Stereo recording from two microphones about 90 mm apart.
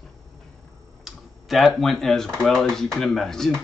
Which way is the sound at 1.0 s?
Centre (ahead or behind).